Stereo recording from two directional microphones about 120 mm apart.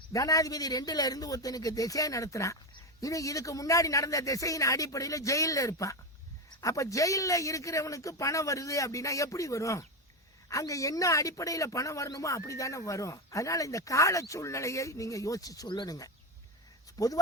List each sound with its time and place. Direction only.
0.1 s speech: 30° left (ahead or behind)